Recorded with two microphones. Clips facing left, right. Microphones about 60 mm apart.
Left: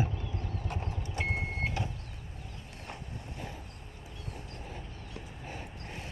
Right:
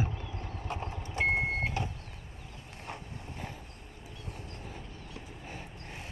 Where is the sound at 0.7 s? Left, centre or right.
Right.